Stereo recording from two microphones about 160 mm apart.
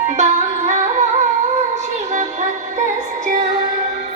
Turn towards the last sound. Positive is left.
turn(degrees=-50)  # may be behind; listen again after turning